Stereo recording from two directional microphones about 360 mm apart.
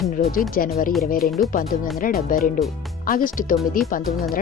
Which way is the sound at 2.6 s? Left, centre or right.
Centre.